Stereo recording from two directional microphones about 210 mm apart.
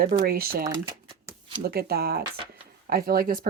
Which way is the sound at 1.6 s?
45° right (ahead or behind).